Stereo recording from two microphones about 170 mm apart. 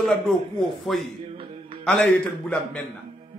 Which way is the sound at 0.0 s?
Centre (ahead or behind).